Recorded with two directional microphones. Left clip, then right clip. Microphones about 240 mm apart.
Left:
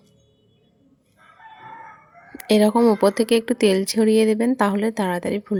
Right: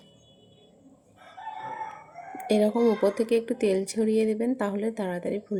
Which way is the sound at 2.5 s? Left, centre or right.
Left.